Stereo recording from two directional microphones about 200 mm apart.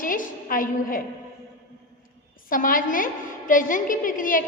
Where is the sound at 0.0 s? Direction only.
45° left (ahead or behind).